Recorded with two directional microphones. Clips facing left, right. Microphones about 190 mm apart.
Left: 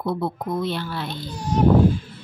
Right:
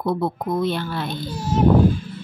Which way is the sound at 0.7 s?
50° right (ahead or behind).